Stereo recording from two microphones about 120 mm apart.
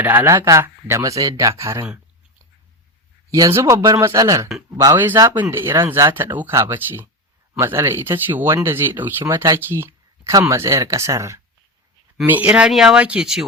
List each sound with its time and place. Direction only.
0.0 s speech: 20° right (ahead or behind)
3.2 s speech: 30° right (ahead or behind)
4.9 s speech: 15° right (ahead or behind)
12.2 s speech: 15° right (ahead or behind)